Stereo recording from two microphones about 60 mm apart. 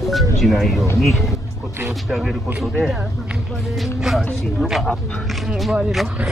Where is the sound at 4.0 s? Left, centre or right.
Centre.